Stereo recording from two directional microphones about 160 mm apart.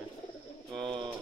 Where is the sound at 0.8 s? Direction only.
30° right (ahead or behind).